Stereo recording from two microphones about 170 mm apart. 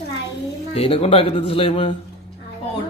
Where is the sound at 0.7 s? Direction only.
35° left (ahead or behind).